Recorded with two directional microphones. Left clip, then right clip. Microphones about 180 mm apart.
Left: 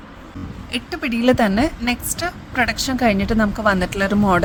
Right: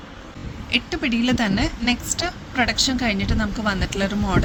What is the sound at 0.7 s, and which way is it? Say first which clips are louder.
Speech: right 2 dB; 50° left (ahead or behind).